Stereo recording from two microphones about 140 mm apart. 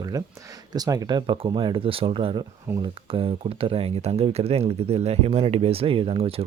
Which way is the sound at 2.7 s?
15° right (ahead or behind).